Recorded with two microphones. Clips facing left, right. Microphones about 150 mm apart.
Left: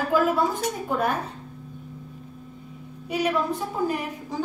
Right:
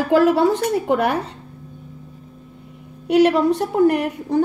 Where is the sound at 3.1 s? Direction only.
75° right (ahead or behind).